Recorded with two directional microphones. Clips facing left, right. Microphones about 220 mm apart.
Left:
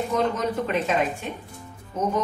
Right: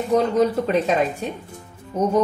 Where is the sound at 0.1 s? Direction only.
35° right (ahead or behind).